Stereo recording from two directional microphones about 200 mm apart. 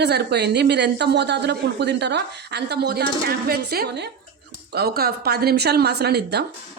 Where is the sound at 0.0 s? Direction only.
55° right (ahead or behind).